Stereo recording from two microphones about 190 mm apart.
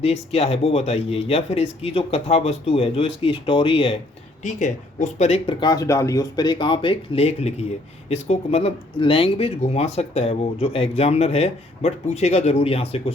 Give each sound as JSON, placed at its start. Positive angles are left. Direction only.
{"t": 0.0, "sound": "speech", "side_deg": 30}
{"t": 4.4, "sound": "speech", "side_deg": 40}